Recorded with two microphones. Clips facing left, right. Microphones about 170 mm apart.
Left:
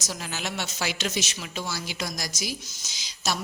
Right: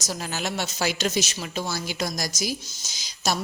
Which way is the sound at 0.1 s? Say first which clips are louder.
Right 4 dB; 40° right (ahead or behind).